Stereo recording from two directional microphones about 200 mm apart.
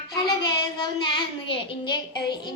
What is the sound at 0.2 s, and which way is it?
Child singing, 20° left (ahead or behind).